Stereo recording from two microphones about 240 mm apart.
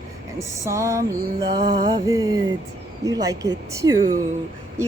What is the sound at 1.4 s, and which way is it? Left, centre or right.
Music, right.